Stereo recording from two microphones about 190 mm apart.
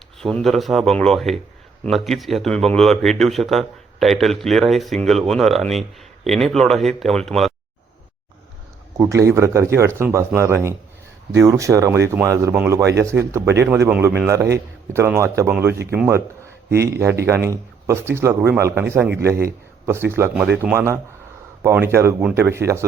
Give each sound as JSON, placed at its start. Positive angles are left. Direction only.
{"t": 0.2, "sound": "speech", "side_deg": 0}
{"t": 9.0, "sound": "speech", "side_deg": -15}
{"t": 17.2, "sound": "speech", "side_deg": -15}